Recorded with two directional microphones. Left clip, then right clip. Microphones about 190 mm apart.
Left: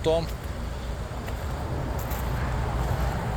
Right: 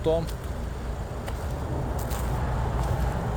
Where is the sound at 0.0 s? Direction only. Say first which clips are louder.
Left 1 dB; 5° right (ahead or behind).